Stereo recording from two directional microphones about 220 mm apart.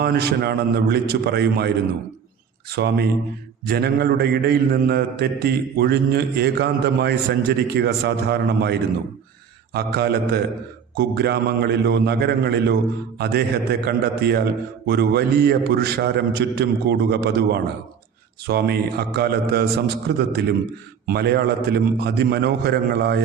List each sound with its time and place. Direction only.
0.0 s a man's voice: 45° right (ahead or behind)